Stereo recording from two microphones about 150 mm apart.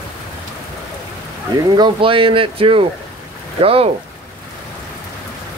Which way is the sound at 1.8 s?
35° right (ahead or behind).